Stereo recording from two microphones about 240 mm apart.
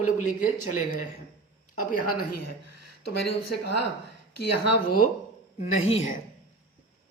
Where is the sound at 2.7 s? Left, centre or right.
Left.